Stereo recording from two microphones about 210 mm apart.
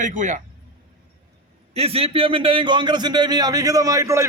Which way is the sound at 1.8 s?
30° right (ahead or behind).